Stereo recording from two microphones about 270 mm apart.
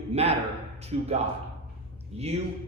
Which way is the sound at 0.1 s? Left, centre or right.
Right.